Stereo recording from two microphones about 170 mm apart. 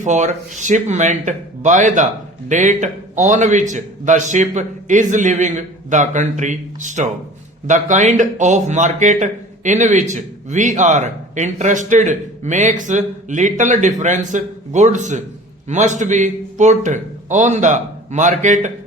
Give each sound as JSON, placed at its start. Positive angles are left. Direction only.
{"t": 0.0, "sound": "speech", "side_deg": -45}